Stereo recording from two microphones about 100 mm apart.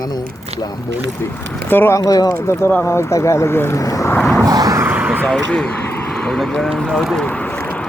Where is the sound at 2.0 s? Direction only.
35° left (ahead or behind).